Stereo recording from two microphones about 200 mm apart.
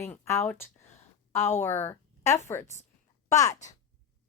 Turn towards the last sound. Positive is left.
turn(degrees=15)  # may be behind; listen again after turning